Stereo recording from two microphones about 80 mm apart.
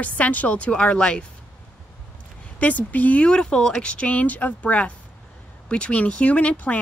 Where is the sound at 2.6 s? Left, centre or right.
Centre.